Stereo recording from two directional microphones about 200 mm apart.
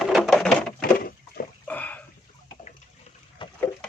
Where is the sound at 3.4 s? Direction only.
25° left (ahead or behind).